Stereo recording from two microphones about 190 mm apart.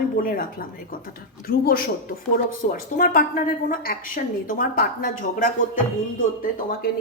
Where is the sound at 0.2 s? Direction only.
50° left (ahead or behind).